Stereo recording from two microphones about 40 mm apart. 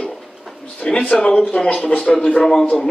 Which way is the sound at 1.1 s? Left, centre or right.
Left.